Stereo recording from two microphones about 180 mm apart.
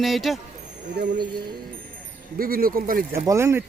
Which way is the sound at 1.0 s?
60° right (ahead or behind).